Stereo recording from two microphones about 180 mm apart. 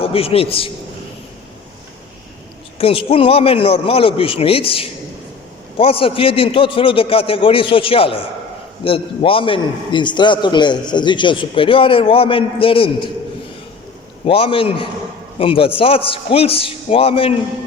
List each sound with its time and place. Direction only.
0.0 s a man's voice: 30° left (ahead or behind)
2.7 s a man's voice: 30° left (ahead or behind)
14.3 s a man's voice: 30° left (ahead or behind)